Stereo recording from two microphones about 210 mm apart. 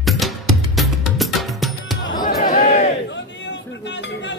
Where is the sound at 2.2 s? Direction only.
40° left (ahead or behind).